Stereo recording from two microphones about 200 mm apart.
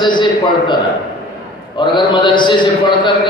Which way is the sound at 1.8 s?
25° left (ahead or behind).